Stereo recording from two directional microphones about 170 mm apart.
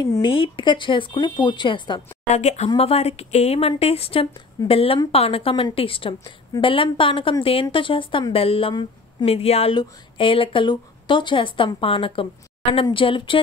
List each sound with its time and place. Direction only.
0.0 s speech: 25° left (ahead or behind)
2.2 s speech: 40° left (ahead or behind)